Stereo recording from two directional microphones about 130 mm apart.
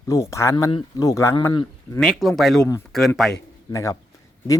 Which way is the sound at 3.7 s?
25° left (ahead or behind).